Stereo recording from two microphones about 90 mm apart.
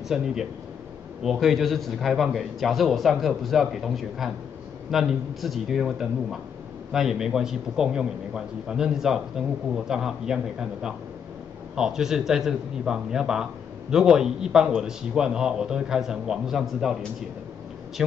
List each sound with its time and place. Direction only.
0.1 s a man's voice: 5° right (ahead or behind)